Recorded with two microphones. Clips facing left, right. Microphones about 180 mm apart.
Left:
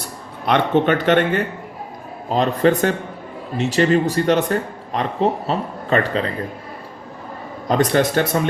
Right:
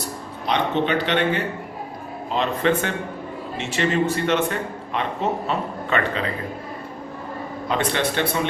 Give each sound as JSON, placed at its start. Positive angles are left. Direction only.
{"t": 0.4, "sound": "a man's voice", "side_deg": 55}
{"t": 7.7, "sound": "speech", "side_deg": 40}